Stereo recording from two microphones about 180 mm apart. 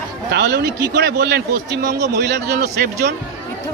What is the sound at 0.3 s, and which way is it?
Speech, 65° right (ahead or behind).